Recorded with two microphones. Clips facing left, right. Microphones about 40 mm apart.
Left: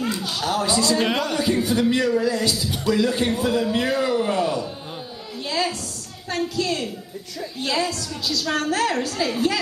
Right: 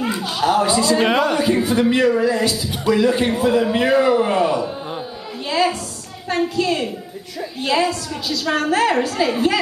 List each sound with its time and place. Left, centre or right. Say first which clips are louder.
0.0 s speech: right 5 dB; right
5.5 s a sound: right 6 dB; right
6.2 s speech: right 5 dB; right